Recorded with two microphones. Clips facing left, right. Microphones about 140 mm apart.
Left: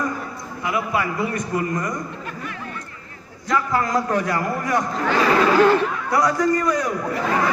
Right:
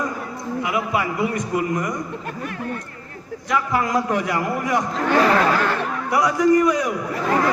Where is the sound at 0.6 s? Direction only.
15° right (ahead or behind).